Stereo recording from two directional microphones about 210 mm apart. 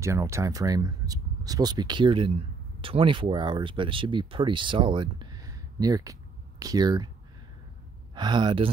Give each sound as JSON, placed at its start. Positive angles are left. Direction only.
{"t": 0.0, "sound": "speech", "side_deg": -15}
{"t": 8.1, "sound": "speech", "side_deg": -20}